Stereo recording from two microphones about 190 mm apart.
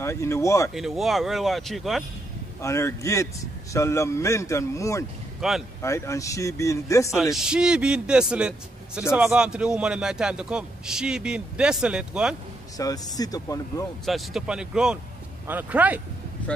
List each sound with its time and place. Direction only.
0.0 s a man's voice: 15° left (ahead or behind)
0.7 s a man's voice: centre (ahead or behind)
2.6 s a man's voice: 15° left (ahead or behind)
5.4 s a man's voice: centre (ahead or behind)
5.8 s a man's voice: 15° left (ahead or behind)
7.3 s a man's voice: 5° right (ahead or behind)
12.7 s speech: 20° left (ahead or behind)
14.0 s a man's voice: centre (ahead or behind)